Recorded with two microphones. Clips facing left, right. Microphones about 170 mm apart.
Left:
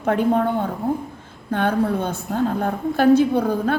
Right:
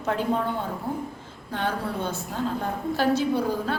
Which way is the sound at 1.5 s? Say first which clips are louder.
Left 8 dB; 55° left (ahead or behind).